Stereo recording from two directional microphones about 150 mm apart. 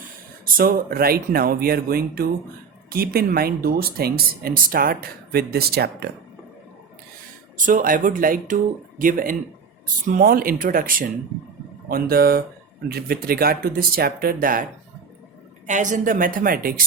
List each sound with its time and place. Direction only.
0.4 s speech: 70° right (ahead or behind); by 6.1 s 90° right
7.5 s a woman's voice: 65° right (ahead or behind)
15.6 s a woman's voice: 55° right (ahead or behind); by 16.8 s 75° right (ahead or behind)